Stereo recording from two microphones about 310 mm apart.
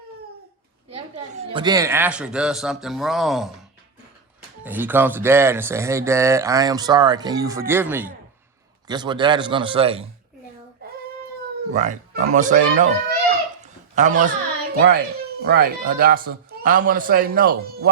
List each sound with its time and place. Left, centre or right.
0.9 s a woman's voice: centre
4.6 s speech: centre
10.8 s child singing: right
11.7 s speech: right
13.6 s a sound: right
14.8 s speech: right